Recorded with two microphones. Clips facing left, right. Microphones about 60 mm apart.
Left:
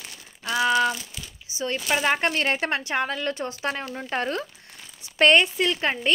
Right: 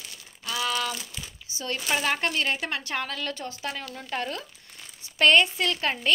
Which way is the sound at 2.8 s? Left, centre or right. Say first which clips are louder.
Left 5 dB; left.